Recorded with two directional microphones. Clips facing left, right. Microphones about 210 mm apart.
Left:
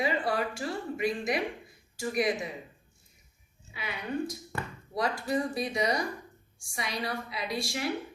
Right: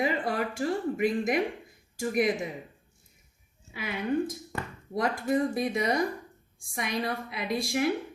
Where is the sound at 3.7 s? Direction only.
50° right (ahead or behind).